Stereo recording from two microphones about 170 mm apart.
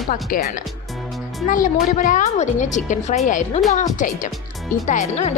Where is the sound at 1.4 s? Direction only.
50° left (ahead or behind).